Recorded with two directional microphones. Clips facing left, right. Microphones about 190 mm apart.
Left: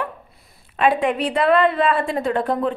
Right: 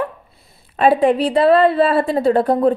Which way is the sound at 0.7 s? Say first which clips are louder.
Right 5 dB; 35° right (ahead or behind).